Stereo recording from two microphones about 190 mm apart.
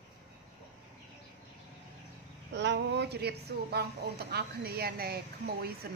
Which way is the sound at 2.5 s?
65° right (ahead or behind).